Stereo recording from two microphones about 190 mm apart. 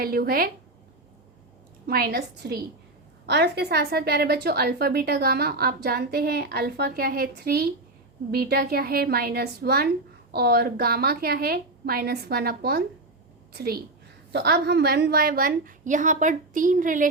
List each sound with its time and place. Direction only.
0.0 s a woman's voice: 50° right (ahead or behind)
1.9 s a woman's voice: 55° right (ahead or behind)